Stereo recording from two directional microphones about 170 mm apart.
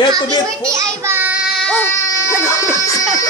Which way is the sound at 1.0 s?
10° right (ahead or behind).